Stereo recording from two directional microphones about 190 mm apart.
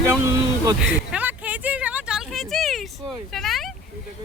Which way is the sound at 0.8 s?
5° right (ahead or behind).